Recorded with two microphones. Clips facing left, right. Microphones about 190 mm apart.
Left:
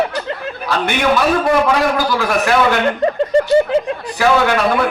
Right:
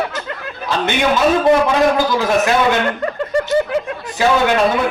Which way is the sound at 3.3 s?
25° left (ahead or behind).